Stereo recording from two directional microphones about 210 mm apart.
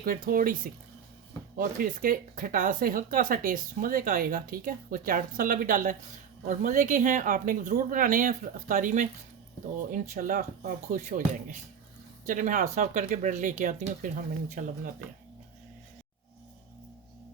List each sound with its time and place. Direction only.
0.0 s speech: 40° right (ahead or behind)